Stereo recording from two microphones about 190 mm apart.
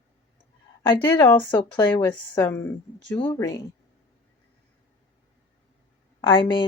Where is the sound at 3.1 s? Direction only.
20° left (ahead or behind).